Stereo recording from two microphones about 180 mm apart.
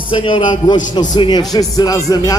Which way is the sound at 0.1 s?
25° left (ahead or behind).